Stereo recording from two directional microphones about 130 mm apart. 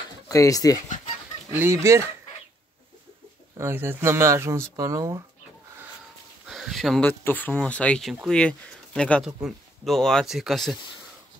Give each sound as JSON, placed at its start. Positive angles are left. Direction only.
{"t": 0.3, "sound": "speech", "side_deg": 25}
{"t": 1.5, "sound": "speech", "side_deg": -20}
{"t": 3.5, "sound": "speech", "side_deg": -20}
{"t": 6.4, "sound": "a sound", "side_deg": 0}
{"t": 7.0, "sound": "speech", "side_deg": 15}